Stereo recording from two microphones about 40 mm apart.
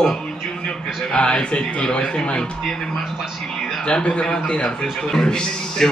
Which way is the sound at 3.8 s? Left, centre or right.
Left.